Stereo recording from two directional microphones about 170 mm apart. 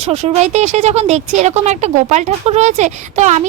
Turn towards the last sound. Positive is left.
turn(degrees=-45)  # may be behind; listen again after turning